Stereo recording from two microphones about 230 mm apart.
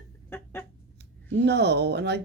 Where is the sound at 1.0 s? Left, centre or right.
Right.